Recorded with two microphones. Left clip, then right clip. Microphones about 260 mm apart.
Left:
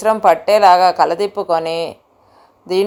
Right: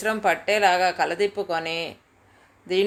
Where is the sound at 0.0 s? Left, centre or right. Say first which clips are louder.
Left 10 dB; centre.